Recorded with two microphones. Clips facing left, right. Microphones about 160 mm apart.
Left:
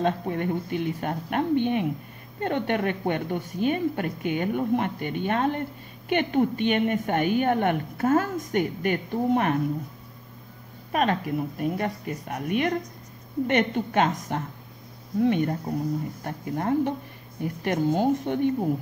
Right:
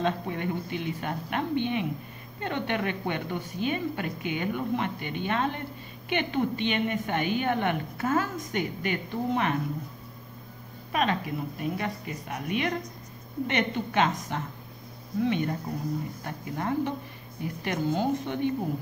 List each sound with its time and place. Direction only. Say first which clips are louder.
0.0 s a woman's voice: left 3 dB; 45° left (ahead or behind)
10.9 s a woman's voice: left 3 dB; 50° left (ahead or behind)